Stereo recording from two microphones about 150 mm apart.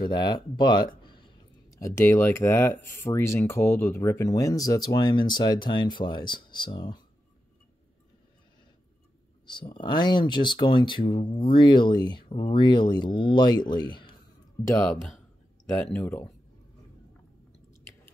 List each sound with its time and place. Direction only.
0.0 s speech: 30° left (ahead or behind)
1.7 s speech: 20° left (ahead or behind)
9.5 s speech: 30° left (ahead or behind)
15.7 s speech: 10° left (ahead or behind)